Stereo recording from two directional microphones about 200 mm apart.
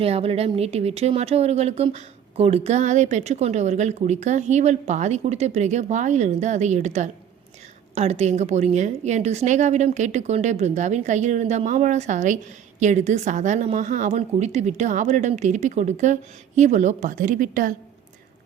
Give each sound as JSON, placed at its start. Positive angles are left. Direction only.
{"t": 0.0, "sound": "speech", "side_deg": -30}